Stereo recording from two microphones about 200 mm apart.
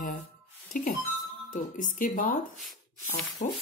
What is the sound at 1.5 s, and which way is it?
Speech, 40° left (ahead or behind).